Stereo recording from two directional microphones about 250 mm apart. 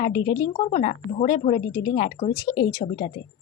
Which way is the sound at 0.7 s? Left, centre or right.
Left.